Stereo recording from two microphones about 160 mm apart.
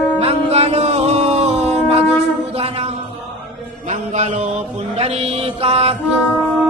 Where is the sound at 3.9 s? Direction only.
45° right (ahead or behind).